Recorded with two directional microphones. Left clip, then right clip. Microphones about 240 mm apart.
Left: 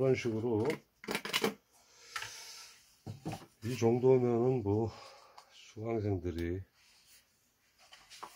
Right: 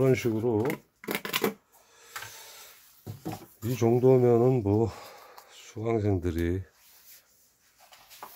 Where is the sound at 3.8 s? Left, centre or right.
Right.